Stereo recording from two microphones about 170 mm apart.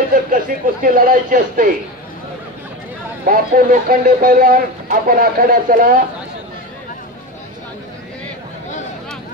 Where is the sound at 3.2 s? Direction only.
55° right (ahead or behind).